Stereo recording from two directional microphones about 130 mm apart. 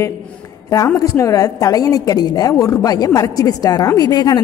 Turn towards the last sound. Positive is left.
turn(degrees=30)  # may be behind; listen again after turning